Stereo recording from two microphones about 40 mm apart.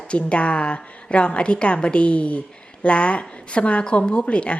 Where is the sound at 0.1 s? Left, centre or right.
Left.